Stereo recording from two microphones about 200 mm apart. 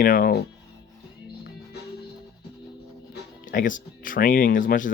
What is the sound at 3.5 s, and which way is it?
Speech, 40° left (ahead or behind).